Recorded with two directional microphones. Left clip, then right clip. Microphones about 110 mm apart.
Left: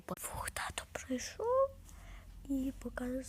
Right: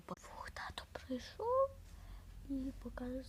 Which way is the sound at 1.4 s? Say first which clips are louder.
Left 3 dB; 15° left (ahead or behind).